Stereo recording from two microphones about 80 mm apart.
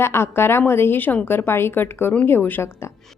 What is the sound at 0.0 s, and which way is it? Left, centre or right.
A woman's voice, left.